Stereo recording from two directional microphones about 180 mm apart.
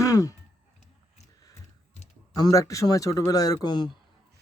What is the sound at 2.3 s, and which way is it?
Speech, 20° left (ahead or behind).